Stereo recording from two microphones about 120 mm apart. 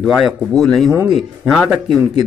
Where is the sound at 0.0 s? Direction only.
5° right (ahead or behind).